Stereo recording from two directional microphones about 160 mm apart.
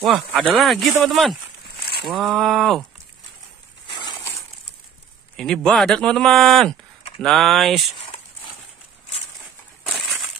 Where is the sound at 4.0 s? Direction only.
25° left (ahead or behind).